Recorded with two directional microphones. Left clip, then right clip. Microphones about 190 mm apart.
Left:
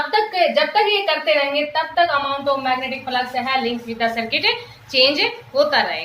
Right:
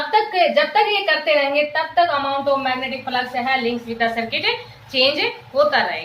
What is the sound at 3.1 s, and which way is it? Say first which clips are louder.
A woman's voice: even; 15° left (ahead or behind).